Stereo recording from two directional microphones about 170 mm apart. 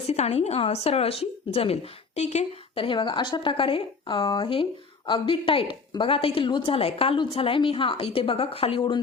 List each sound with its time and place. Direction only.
0.1 s a woman's voice: 40° left (ahead or behind)